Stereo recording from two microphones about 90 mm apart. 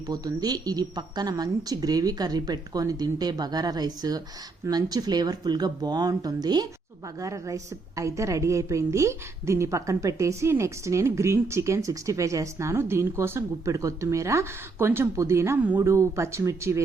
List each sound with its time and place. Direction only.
0.1 s a woman's voice: 45° right (ahead or behind)